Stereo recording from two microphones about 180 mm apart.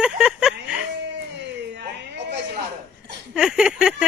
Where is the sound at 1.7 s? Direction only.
70° right (ahead or behind).